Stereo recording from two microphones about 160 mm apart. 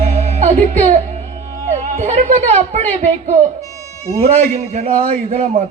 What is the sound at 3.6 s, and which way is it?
Music, 20° left (ahead or behind).